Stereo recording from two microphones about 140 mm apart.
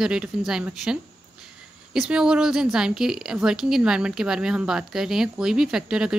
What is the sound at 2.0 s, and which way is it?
A woman's voice, 5° right (ahead or behind).